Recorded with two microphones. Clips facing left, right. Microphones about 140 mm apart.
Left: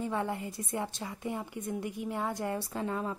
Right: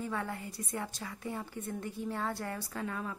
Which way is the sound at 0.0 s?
20° left (ahead or behind).